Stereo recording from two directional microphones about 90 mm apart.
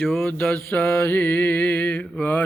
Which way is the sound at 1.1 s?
20° left (ahead or behind).